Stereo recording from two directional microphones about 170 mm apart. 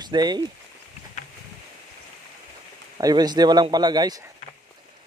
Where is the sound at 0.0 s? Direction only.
25° right (ahead or behind).